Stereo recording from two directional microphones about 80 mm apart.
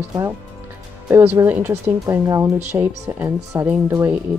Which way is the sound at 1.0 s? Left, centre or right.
Right.